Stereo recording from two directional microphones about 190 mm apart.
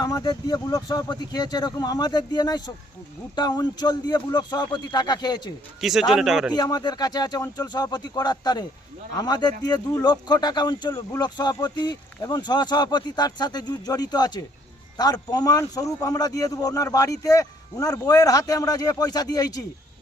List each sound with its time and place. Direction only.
0.0 s speech: 20° left (ahead or behind)
5.8 s speech: centre (ahead or behind)
6.5 s speech: 20° left (ahead or behind)